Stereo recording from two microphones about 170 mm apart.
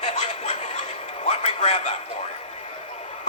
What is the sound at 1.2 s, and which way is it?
Speech, 40° left (ahead or behind).